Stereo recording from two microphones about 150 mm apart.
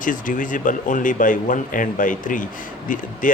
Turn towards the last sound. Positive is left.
turn(degrees=60)  # may be behind; listen again after turning